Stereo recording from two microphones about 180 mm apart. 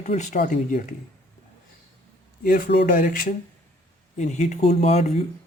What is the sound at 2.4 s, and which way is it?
Speech, 50° left (ahead or behind).